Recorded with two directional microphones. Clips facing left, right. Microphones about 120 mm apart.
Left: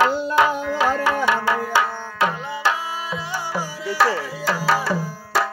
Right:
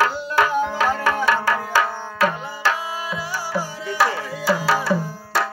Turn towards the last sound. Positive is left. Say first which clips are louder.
# left 1 dB
turn(degrees=5)  # may be behind; listen again after turning